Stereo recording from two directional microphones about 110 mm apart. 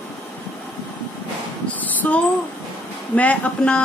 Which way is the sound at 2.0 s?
15° left (ahead or behind).